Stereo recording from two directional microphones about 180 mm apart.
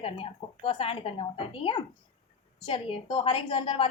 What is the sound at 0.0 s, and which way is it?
A woman's voice, 30° left (ahead or behind).